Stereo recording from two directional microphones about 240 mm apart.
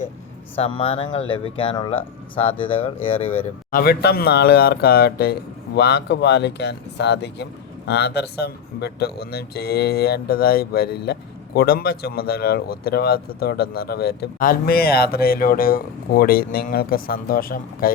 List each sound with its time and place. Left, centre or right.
0.5 s speech: left
3.7 s speech: left